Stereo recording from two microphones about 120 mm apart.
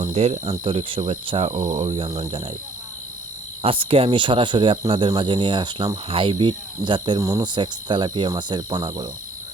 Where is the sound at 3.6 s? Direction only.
50° right (ahead or behind).